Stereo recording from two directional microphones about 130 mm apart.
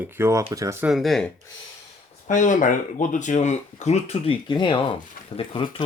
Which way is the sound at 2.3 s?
75° left (ahead or behind).